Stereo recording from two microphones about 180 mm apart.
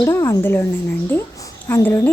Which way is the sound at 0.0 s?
20° left (ahead or behind).